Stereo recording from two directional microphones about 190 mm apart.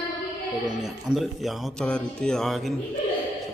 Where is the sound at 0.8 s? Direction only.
Centre (ahead or behind).